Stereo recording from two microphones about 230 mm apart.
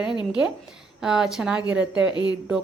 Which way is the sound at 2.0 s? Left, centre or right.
Centre.